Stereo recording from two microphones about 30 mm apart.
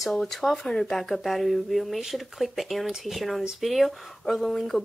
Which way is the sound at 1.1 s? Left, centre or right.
Centre.